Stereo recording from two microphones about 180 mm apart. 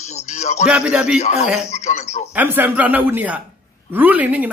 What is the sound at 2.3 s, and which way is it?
Speech, 10° right (ahead or behind).